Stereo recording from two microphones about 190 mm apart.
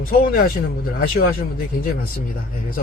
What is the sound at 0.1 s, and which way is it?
A man's voice, 50° left (ahead or behind).